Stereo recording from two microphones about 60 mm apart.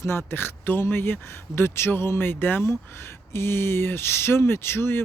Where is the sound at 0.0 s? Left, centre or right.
Left.